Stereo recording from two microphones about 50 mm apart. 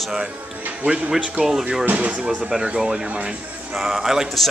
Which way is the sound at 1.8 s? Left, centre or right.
Right.